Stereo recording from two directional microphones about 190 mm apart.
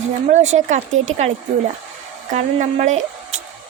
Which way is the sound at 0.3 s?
40° right (ahead or behind).